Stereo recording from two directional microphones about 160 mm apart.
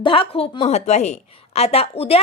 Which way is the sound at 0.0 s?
35° left (ahead or behind).